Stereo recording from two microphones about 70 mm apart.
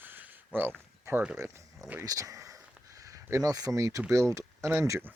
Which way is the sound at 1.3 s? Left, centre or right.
Right.